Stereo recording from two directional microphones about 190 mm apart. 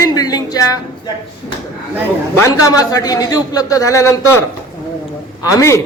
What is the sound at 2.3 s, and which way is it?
A man's voice, 15° left (ahead or behind).